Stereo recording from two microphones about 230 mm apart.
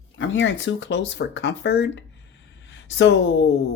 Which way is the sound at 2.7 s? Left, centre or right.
Left.